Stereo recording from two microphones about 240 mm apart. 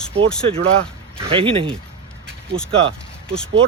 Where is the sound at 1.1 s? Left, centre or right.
Right.